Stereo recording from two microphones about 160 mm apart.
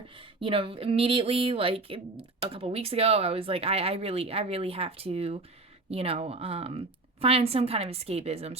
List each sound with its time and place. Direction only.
0.2 s speech: 35° right (ahead or behind)